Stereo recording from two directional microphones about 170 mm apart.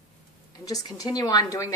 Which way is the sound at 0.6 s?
20° left (ahead or behind).